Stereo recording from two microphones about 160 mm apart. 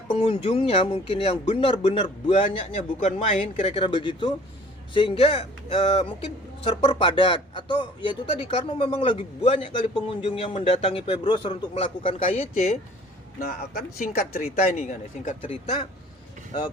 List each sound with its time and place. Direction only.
0.1 s speech: 30° left (ahead or behind)
13.4 s speech: 70° left (ahead or behind)
14.8 s speech: 50° left (ahead or behind)